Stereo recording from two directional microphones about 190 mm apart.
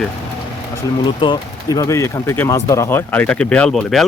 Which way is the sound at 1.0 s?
25° left (ahead or behind).